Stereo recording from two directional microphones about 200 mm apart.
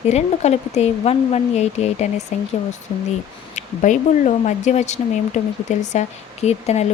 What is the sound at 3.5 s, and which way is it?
Speech, 40° left (ahead or behind).